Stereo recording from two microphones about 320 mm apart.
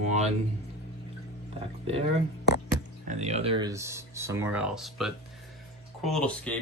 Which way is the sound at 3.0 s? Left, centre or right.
Right.